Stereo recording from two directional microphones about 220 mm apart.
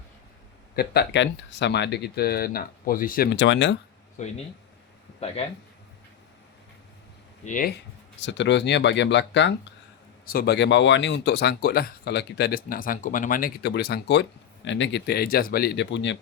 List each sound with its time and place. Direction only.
0.8 s speech: 50° left (ahead or behind)
4.2 s speech: 35° left (ahead or behind)
5.4 s speech: 30° left (ahead or behind)
7.4 s speech: 35° left (ahead or behind)
8.2 s speech: 55° left (ahead or behind)